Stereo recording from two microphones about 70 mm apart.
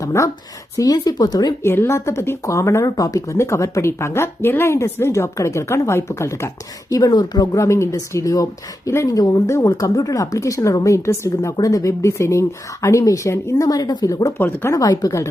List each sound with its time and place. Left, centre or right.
0.0 s speech: left
0.8 s speech: left
1.6 s speech: left
2.8 s speech: left
3.3 s speech: left
6.9 s speech: left
7.5 s speech: left
9.0 s speech: left
9.5 s speech: left
11.5 s speech: left
13.7 s speech: left
14.3 s speech: left
14.8 s speech: left